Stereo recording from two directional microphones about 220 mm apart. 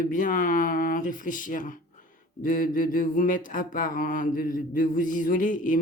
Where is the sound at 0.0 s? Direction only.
35° left (ahead or behind).